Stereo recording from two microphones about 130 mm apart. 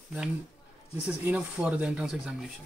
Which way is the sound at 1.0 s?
10° right (ahead or behind).